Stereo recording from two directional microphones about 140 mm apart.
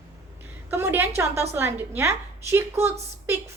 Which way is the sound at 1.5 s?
15° right (ahead or behind).